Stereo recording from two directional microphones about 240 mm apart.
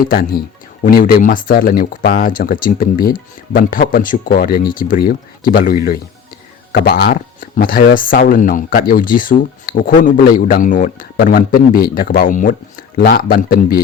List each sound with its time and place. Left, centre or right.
0.1 s speech: left